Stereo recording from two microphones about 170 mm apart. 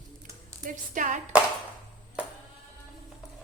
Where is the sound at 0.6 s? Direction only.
50° right (ahead or behind).